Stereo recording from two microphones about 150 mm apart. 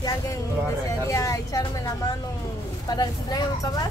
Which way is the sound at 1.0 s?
20° left (ahead or behind).